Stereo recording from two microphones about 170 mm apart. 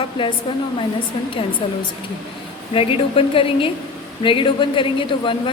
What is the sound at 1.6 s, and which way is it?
A woman's voice, 35° left (ahead or behind).